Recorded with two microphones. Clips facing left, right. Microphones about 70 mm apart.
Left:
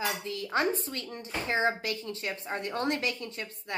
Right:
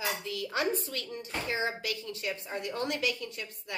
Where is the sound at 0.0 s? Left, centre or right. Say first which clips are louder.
Left 1 dB; left.